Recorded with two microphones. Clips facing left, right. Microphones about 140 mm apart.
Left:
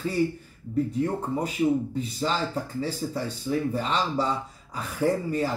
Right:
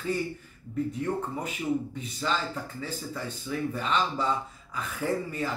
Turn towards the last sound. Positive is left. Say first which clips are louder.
# left 5 dB
turn(degrees=35)  # may be behind; listen again after turning